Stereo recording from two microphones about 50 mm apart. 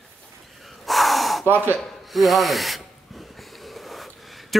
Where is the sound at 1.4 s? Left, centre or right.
Right.